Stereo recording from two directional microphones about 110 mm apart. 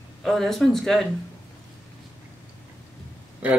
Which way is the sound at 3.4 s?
15° right (ahead or behind).